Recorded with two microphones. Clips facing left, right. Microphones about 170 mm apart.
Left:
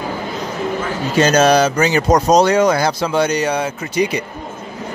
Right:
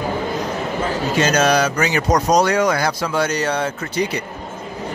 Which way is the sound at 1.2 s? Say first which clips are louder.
Left 5 dB; 30° left (ahead or behind).